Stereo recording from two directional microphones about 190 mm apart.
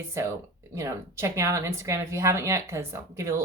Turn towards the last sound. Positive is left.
turn(degrees=-15)  # may be behind; listen again after turning